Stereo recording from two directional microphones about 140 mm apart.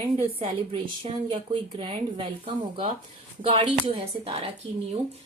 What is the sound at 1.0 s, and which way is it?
A woman's voice, 40° right (ahead or behind).